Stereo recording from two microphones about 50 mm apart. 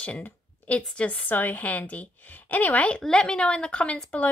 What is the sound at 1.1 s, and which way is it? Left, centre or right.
Speech, left.